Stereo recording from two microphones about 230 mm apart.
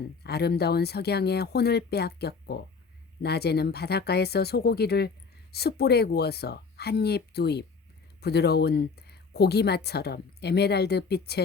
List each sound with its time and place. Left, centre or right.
0.2 s speech: left